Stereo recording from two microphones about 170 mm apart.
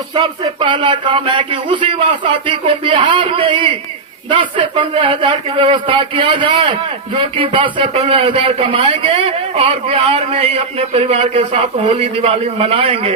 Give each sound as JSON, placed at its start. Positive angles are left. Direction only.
{"t": 0.1, "sound": "a man's voice", "side_deg": -30}